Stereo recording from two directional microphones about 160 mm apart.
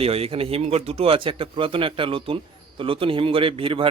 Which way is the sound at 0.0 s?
40° right (ahead or behind).